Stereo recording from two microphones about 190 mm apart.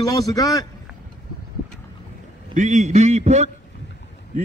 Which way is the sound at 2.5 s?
40° right (ahead or behind).